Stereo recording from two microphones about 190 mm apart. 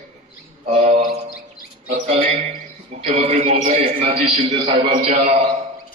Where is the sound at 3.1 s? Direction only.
30° right (ahead or behind).